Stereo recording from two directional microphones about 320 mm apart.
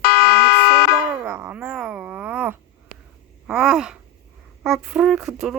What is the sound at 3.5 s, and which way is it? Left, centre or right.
Speech, centre.